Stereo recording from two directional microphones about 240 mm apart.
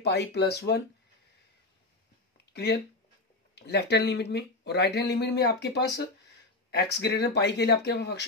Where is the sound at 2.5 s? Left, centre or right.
Left.